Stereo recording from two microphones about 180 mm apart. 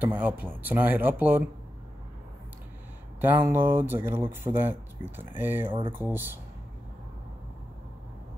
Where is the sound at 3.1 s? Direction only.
10° right (ahead or behind).